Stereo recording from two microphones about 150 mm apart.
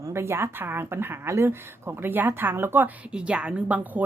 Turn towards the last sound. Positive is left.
turn(degrees=-10)  # may be behind; listen again after turning